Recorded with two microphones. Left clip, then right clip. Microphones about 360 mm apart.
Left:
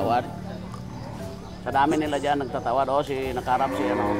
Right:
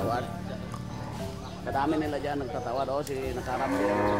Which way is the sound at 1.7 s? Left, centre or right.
Left.